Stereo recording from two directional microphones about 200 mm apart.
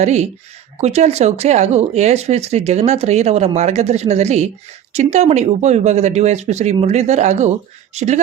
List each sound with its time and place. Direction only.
0.0 s speech: 35° right (ahead or behind)